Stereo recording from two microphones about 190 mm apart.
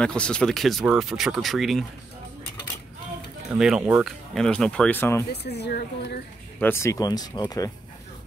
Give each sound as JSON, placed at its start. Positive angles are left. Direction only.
{"t": 0.0, "sound": "speech", "side_deg": 5}
{"t": 3.5, "sound": "speech", "side_deg": -5}
{"t": 5.4, "sound": "a woman's voice", "side_deg": 60}
{"t": 6.6, "sound": "speech", "side_deg": 15}